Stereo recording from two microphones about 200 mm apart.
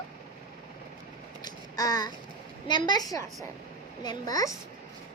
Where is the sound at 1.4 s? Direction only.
20° left (ahead or behind).